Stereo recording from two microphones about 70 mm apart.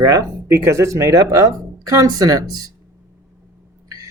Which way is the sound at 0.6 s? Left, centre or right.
Right.